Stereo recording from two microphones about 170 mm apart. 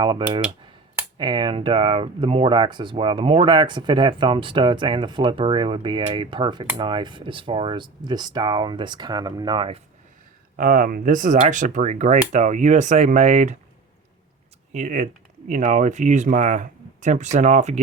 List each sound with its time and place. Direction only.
0.0 s speech: 30° right (ahead or behind)
10.6 s speech: 55° right (ahead or behind)
14.7 s speech: 45° right (ahead or behind)